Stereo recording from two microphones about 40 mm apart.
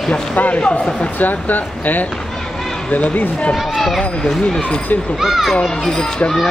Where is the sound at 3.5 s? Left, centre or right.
Centre.